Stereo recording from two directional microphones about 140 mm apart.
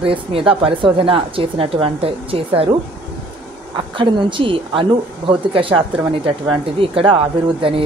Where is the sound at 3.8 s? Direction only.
35° right (ahead or behind).